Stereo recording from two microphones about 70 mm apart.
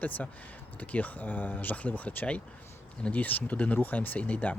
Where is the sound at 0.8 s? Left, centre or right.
Left.